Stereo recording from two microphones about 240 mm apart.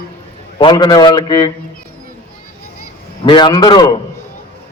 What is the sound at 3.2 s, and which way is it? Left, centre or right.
Speech, centre.